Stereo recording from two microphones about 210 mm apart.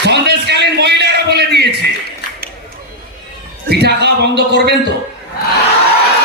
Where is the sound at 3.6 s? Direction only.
50° right (ahead or behind).